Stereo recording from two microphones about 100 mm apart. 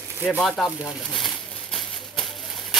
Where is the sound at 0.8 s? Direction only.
Centre (ahead or behind).